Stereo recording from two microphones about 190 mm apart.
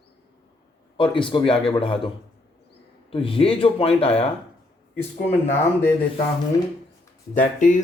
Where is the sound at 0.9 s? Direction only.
25° left (ahead or behind).